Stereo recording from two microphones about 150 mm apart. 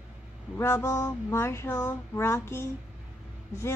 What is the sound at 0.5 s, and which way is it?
A woman's voice, 15° left (ahead or behind).